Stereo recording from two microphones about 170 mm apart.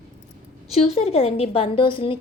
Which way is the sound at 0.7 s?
40° left (ahead or behind).